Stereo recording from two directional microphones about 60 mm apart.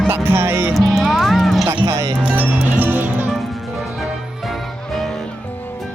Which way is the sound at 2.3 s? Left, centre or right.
Right.